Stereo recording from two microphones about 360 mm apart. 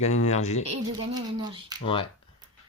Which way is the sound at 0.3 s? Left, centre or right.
Centre.